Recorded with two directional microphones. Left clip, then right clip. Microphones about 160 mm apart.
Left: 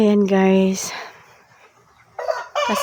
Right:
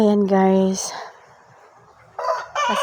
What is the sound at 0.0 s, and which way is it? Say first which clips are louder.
Speech: even; 40° left (ahead or behind).